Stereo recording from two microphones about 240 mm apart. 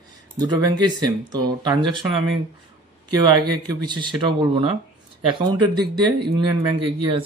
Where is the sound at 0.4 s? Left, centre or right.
Centre.